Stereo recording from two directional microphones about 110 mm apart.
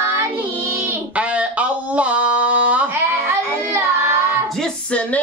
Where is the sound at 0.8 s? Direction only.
15° right (ahead or behind).